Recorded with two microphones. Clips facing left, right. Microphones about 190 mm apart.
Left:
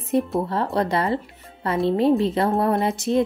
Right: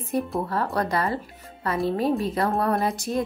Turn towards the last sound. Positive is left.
turn(degrees=25)  # may be behind; listen again after turning